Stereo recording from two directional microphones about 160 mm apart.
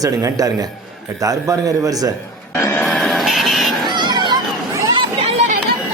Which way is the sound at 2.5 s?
15° left (ahead or behind).